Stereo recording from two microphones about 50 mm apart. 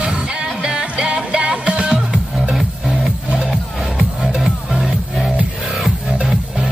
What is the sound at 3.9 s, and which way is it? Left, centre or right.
Music, centre.